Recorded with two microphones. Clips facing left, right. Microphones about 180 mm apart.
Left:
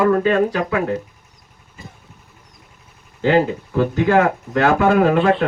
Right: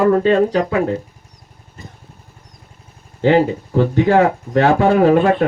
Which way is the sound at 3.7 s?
35° right (ahead or behind).